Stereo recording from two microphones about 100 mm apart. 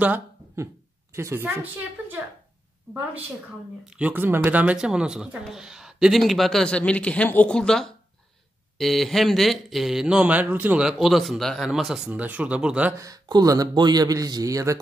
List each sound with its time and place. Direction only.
1.1 s a woman's voice: 25° right (ahead or behind)
3.8 s speech: 10° right (ahead or behind)
4.1 s speech: 20° right (ahead or behind)
10.8 s speech: 5° right (ahead or behind)
12.1 s speech: 15° right (ahead or behind)
12.9 s a man's voice: 35° right (ahead or behind)